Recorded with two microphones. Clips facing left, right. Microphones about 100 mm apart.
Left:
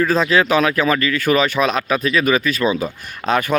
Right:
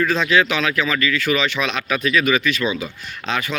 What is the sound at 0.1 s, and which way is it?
Speech, 40° left (ahead or behind).